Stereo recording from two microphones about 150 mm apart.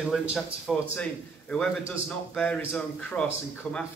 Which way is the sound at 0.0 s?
5° right (ahead or behind).